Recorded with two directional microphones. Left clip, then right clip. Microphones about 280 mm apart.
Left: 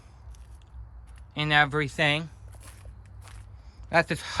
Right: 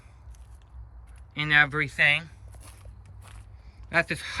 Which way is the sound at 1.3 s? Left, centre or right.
Centre.